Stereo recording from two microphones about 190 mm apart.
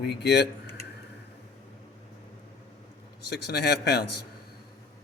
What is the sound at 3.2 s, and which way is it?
Speech, 60° left (ahead or behind).